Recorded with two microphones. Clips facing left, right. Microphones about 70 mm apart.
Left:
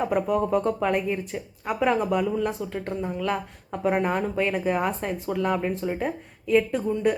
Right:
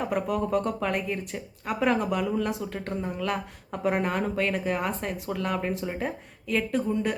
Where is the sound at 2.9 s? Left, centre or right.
Centre.